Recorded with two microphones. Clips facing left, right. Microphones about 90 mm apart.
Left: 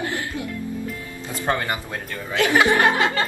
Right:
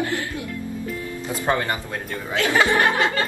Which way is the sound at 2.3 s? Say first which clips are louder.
Left 1 dB; 20° left (ahead or behind).